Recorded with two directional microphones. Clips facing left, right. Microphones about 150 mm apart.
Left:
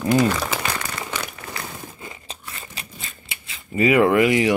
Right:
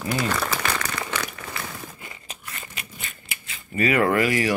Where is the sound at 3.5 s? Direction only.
20° left (ahead or behind).